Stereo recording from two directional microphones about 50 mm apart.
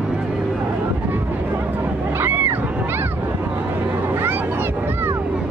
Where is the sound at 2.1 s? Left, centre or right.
Right.